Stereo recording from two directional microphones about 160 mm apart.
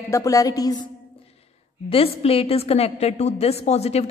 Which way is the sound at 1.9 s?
35° left (ahead or behind).